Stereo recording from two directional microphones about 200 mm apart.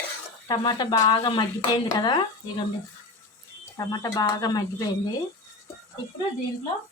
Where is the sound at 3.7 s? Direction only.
20° left (ahead or behind).